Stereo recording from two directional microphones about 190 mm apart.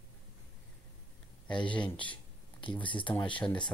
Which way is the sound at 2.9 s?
25° left (ahead or behind).